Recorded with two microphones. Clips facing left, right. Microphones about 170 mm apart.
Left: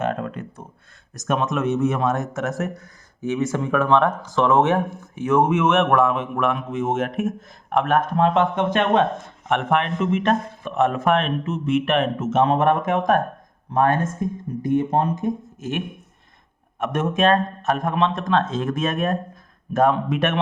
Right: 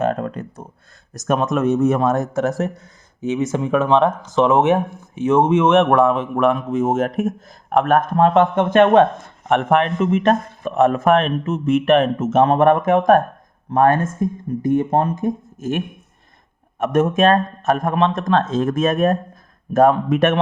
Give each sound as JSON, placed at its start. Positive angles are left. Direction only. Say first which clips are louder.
{"t": 0.0, "sound": "a sound", "louder": "right 4 dB", "side_deg": -40}
{"t": 1.1, "sound": "speech", "louder": "right 4 dB", "side_deg": -40}
{"t": 3.2, "sound": "a man's voice", "louder": "right 2 dB", "side_deg": -20}
{"t": 16.8, "sound": "a man's voice", "louder": "right 5 dB", "side_deg": -45}